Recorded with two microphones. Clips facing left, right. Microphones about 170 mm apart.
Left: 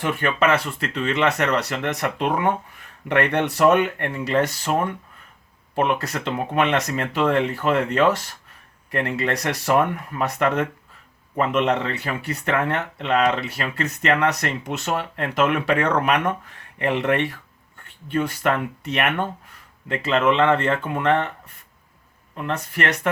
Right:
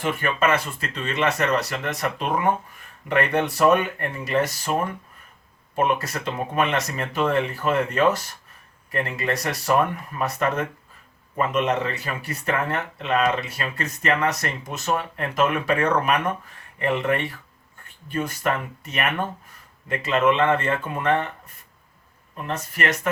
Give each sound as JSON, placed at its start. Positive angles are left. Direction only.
{"t": 0.0, "sound": "speech", "side_deg": 65}
{"t": 22.4, "sound": "speech", "side_deg": 65}